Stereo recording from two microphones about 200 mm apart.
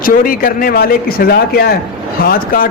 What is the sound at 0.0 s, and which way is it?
A man's voice, 45° left (ahead or behind).